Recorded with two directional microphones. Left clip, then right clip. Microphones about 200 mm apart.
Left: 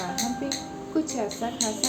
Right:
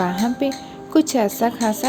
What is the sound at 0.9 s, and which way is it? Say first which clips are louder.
Speech: right 11 dB; 50° right (ahead or behind).